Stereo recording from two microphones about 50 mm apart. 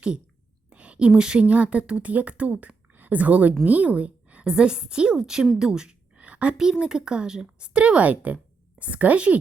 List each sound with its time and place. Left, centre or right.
0.7 s a woman's voice: right
5.5 s a sound: centre
6.6 s a woman's voice: centre